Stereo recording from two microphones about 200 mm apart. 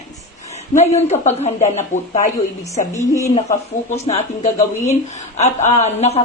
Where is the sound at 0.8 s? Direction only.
35° left (ahead or behind).